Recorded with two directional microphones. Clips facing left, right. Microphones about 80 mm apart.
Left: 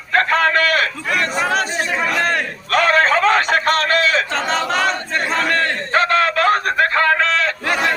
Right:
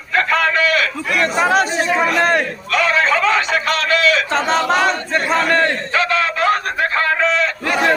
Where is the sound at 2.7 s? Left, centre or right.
Left.